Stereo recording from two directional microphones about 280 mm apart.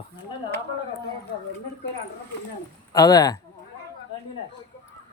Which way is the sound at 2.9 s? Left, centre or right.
Centre.